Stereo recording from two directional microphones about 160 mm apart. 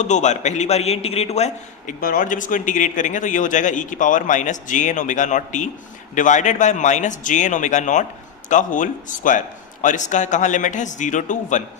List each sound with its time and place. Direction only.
0.0 s speech: 50° left (ahead or behind)
2.0 s speech: 60° left (ahead or behind)